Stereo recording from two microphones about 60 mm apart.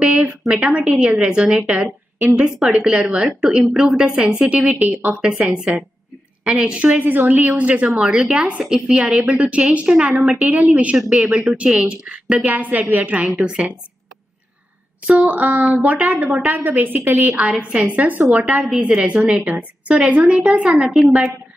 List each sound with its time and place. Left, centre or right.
0.0 s a sound: centre
0.5 s a woman's voice: right
4.6 s a woman's voice: right
13.4 s a woman's voice: centre
15.0 s a woman's voice: right
17.4 s a woman's voice: centre
19.5 s a woman's voice: centre
20.1 s a woman's voice: centre